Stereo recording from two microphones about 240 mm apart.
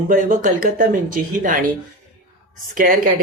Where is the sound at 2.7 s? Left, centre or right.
Right.